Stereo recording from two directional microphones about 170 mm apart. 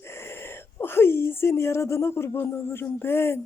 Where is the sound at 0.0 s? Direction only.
15° left (ahead or behind).